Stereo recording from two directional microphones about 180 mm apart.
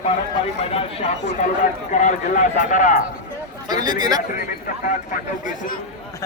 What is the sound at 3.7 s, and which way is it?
Speech, 20° right (ahead or behind).